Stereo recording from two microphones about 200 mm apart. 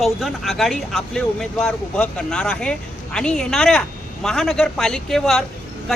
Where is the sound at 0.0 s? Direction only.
Centre (ahead or behind).